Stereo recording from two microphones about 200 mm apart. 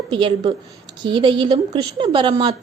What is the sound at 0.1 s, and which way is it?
Speech, 25° right (ahead or behind).